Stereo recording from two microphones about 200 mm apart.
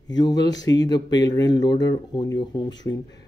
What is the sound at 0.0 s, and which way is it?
Speech, 20° left (ahead or behind).